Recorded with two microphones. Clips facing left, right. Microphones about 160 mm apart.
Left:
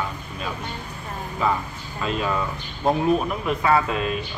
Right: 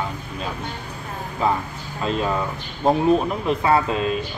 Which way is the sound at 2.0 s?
30° right (ahead or behind).